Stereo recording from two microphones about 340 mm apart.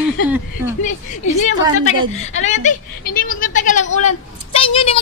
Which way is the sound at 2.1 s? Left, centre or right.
Centre.